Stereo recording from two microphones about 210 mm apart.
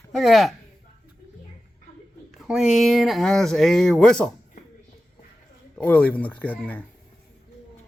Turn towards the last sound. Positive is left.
turn(degrees=10)  # may be behind; listen again after turning